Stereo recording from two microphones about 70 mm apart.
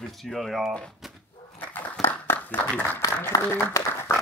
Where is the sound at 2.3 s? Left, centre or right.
Left.